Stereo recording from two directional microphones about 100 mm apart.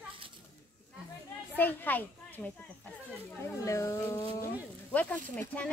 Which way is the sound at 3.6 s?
30° left (ahead or behind).